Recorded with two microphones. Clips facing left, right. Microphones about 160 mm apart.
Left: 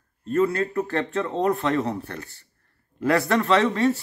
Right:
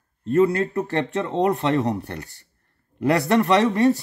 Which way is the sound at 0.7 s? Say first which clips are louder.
Right 1 dB; 20° right (ahead or behind).